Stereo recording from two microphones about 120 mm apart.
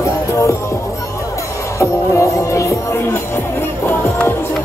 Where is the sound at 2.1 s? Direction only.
25° left (ahead or behind).